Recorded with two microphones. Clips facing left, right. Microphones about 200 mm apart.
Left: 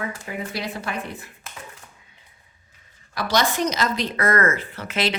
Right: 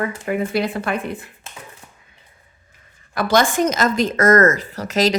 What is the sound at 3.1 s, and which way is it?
A woman's voice, 55° right (ahead or behind).